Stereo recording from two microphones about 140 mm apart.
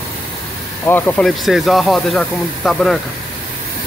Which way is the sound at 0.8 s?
15° left (ahead or behind).